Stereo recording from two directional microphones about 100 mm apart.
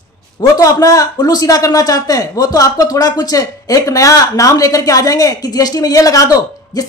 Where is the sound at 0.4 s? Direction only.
40° left (ahead or behind).